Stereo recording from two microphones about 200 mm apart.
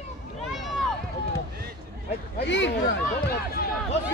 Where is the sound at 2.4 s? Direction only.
65° left (ahead or behind).